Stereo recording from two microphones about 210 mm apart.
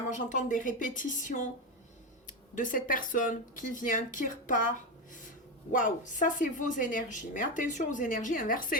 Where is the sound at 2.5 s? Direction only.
40° left (ahead or behind).